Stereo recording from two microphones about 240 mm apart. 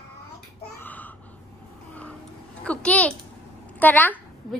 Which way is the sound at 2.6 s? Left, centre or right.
Centre.